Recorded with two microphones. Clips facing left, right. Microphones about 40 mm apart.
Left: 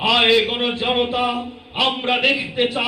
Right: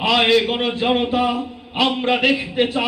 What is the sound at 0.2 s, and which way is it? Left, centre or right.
A man's voice, centre.